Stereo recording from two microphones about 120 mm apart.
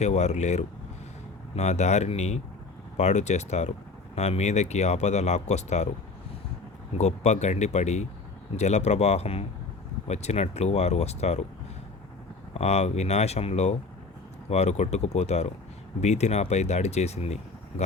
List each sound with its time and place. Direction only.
0.0 s speech: 70° left (ahead or behind)
7.0 s speech: 70° left (ahead or behind)
12.5 s speech: 65° left (ahead or behind)